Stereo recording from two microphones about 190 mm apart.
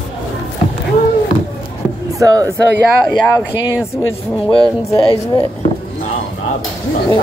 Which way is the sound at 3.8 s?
15° left (ahead or behind).